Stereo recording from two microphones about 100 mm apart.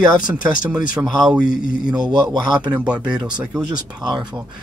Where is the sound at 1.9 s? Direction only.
45° right (ahead or behind).